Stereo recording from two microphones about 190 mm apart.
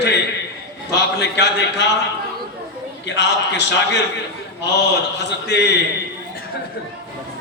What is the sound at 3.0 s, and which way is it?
Speech, 65° left (ahead or behind).